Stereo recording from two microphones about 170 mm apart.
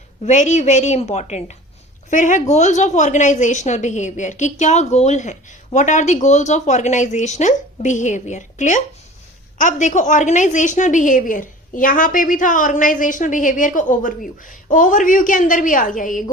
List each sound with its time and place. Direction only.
0.3 s a woman's voice: 45° left (ahead or behind)